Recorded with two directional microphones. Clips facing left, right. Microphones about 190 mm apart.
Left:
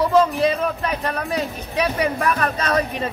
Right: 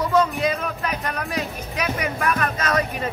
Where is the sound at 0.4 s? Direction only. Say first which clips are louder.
Left 4 dB; 30° left (ahead or behind).